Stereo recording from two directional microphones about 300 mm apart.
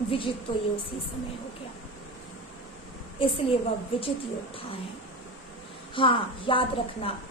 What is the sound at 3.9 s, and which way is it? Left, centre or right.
Speech, centre.